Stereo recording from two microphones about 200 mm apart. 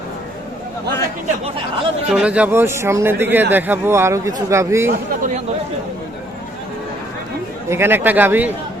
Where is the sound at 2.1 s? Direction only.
5° right (ahead or behind).